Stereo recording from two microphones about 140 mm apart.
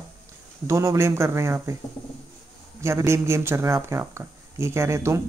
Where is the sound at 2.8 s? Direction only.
20° right (ahead or behind).